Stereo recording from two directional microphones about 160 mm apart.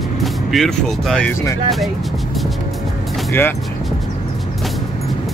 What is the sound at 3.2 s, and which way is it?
Speech, 15° left (ahead or behind).